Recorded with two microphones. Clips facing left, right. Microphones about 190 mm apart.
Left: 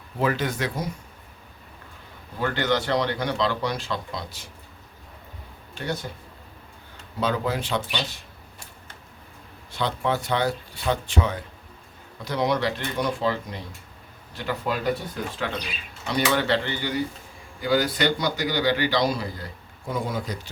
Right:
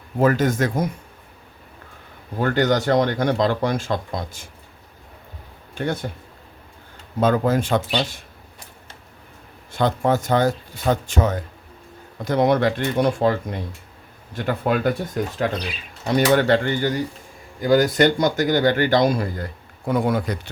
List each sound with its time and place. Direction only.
0.2 s speech: 45° right (ahead or behind)
2.4 s speech: 45° right (ahead or behind)
5.7 s speech: 55° right (ahead or behind)
7.2 s speech: 50° right (ahead or behind)
9.7 s speech: 45° right (ahead or behind)
16.0 s speech: 45° right (ahead or behind)
19.9 s speech: 60° right (ahead or behind)